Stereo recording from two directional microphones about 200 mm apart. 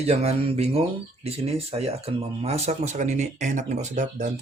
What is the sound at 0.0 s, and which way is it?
Speech, 30° right (ahead or behind).